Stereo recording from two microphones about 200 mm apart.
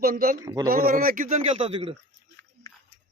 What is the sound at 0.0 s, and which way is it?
Speech, 45° right (ahead or behind).